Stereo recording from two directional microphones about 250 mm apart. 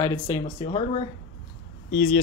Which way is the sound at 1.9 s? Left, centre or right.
Left.